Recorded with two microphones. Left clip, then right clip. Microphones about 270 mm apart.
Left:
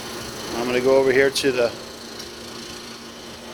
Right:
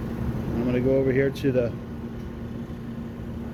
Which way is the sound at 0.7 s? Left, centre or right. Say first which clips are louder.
Left 6 dB; left.